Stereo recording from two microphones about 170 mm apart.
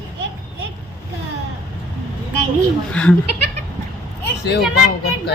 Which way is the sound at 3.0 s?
5° left (ahead or behind).